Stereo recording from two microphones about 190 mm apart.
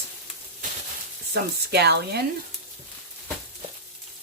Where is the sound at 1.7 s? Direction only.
60° right (ahead or behind).